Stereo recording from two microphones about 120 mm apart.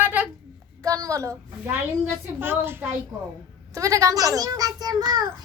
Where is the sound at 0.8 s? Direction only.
30° right (ahead or behind).